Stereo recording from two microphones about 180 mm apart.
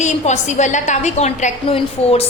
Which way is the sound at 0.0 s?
40° left (ahead or behind).